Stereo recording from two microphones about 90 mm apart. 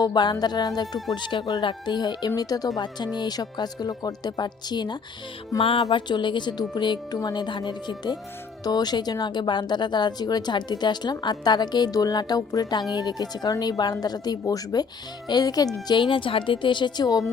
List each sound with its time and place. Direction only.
0.0 s speech: 55° left (ahead or behind)
1.1 s speech: 60° left (ahead or behind)
5.6 s music: 90° left
6.1 s speech: 60° left (ahead or behind)
16.0 s speech: 70° left (ahead or behind); by 17.2 s 45° left (ahead or behind)